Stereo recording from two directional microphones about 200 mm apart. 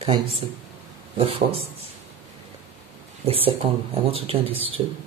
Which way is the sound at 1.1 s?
30° right (ahead or behind).